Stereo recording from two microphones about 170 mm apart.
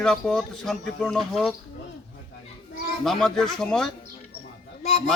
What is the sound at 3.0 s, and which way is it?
Speech, centre (ahead or behind).